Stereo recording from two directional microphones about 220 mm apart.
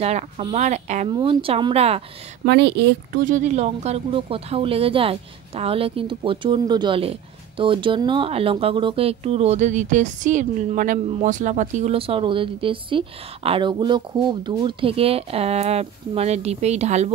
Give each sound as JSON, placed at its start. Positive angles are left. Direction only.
{"t": 0.0, "sound": "speech", "side_deg": -30}
{"t": 2.4, "sound": "speech", "side_deg": -50}
{"t": 3.3, "sound": "speech", "side_deg": -30}